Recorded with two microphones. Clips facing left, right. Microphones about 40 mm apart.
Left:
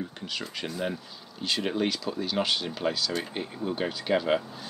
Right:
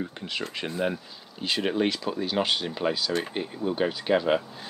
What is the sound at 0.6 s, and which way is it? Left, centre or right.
Speech, right.